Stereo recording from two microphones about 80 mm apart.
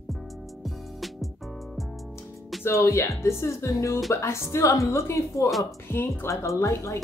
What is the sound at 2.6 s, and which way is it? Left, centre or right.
Speech, left.